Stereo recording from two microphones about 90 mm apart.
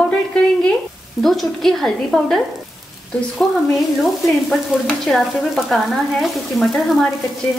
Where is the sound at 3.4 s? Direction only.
Centre (ahead or behind).